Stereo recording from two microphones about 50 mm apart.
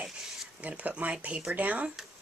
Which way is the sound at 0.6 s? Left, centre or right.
Right.